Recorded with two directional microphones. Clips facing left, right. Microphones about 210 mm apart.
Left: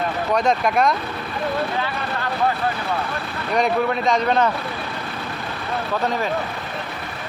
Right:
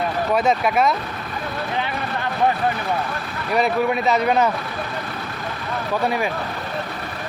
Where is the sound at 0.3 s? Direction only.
5° right (ahead or behind).